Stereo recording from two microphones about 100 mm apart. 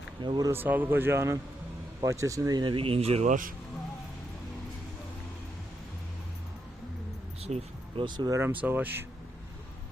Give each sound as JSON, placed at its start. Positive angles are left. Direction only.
{"t": 0.2, "sound": "speech", "side_deg": -50}
{"t": 0.5, "sound": "speech", "side_deg": -20}
{"t": 2.6, "sound": "speech", "side_deg": -65}
{"t": 7.4, "sound": "a sound", "side_deg": -90}
{"t": 8.0, "sound": "speech", "side_deg": -45}
{"t": 8.3, "sound": "speech", "side_deg": -25}